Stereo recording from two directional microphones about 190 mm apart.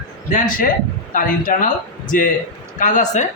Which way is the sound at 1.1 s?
45° left (ahead or behind).